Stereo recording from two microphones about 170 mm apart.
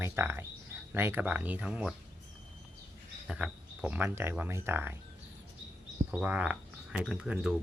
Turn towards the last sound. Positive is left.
turn(degrees=-5)  # may be behind; listen again after turning